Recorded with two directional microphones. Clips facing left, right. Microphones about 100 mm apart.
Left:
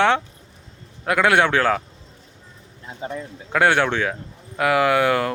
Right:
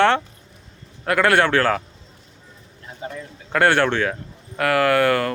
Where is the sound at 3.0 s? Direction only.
25° left (ahead or behind).